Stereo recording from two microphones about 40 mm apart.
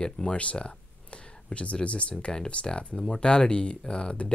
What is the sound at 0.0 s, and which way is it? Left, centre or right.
Speech, centre.